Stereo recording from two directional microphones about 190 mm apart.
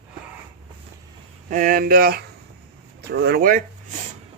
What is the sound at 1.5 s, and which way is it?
Speech, 45° right (ahead or behind).